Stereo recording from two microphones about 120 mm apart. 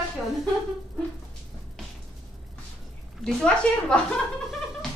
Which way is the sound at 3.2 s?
10° left (ahead or behind).